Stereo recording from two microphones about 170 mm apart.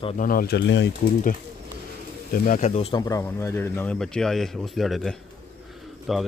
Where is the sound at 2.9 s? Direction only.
20° left (ahead or behind); by 6.2 s centre (ahead or behind).